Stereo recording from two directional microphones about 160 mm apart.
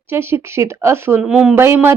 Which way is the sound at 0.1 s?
15° right (ahead or behind).